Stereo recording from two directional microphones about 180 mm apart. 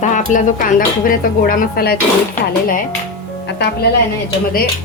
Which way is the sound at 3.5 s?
70° left (ahead or behind).